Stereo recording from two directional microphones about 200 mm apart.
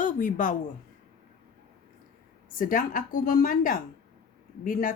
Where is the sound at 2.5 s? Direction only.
45° left (ahead or behind).